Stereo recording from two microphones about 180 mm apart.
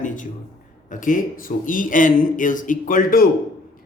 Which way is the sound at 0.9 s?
45° left (ahead or behind).